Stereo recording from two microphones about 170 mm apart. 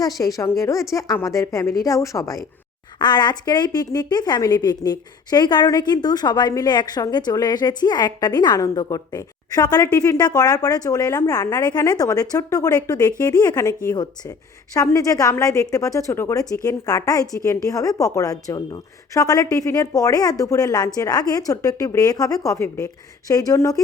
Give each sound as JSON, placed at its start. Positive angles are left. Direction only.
{"t": 0.2, "sound": "a woman's voice", "side_deg": 20}